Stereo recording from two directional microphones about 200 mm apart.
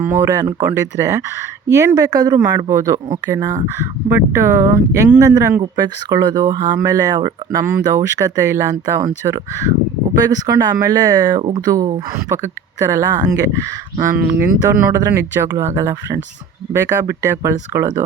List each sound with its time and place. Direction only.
0.0 s speech: 15° right (ahead or behind)